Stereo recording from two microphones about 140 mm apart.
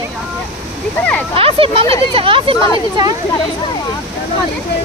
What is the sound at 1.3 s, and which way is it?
Speech, 40° right (ahead or behind).